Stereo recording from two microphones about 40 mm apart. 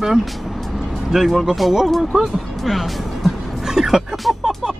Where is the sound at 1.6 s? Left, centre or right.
Centre.